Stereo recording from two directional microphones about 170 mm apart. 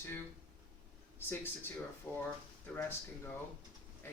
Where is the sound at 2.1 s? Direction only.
10° left (ahead or behind).